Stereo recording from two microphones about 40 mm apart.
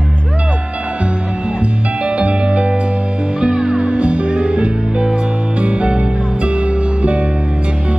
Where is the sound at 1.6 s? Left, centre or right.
Right.